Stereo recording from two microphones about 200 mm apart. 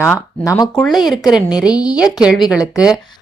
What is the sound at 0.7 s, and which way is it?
Speech, centre (ahead or behind).